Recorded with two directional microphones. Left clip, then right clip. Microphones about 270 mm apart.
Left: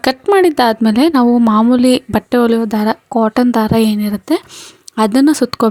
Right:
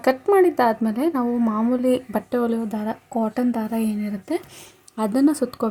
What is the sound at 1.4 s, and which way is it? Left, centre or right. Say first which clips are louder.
Speech: left 11 dB; left.